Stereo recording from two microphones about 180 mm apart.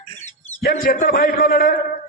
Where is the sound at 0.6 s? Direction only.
55° left (ahead or behind).